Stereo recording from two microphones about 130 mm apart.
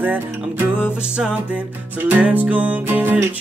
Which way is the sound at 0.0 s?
15° right (ahead or behind).